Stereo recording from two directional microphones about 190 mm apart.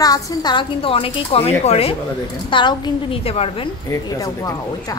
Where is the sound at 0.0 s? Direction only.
20° left (ahead or behind).